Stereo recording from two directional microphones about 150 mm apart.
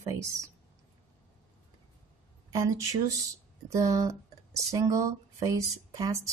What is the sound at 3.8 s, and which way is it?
Speech, 20° right (ahead or behind).